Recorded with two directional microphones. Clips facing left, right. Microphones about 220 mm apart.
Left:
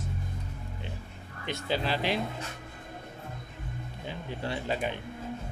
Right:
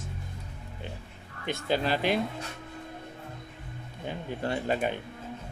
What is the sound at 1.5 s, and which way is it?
Speech, 50° right (ahead or behind).